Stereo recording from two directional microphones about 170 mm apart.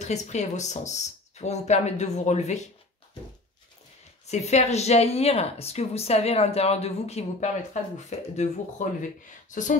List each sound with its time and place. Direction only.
0.0 s speech: 40° left (ahead or behind)
4.3 s speech: 40° left (ahead or behind)